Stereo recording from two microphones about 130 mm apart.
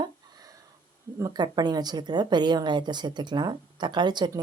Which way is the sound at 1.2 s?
30° right (ahead or behind).